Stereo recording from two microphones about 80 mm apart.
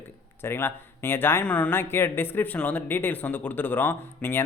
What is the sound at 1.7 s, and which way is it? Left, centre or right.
Speech, left.